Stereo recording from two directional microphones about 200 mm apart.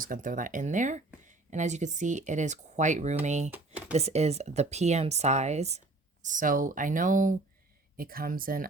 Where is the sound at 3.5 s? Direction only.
5° right (ahead or behind).